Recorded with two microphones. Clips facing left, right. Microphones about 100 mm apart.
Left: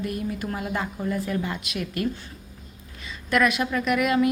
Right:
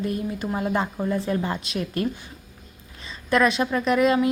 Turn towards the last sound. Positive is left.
turn(degrees=-30)  # may be behind; listen again after turning